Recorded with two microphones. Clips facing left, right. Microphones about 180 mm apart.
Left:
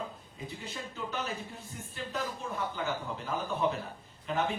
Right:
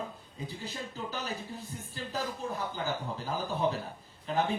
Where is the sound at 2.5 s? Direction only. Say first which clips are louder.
Even; 35° right (ahead or behind).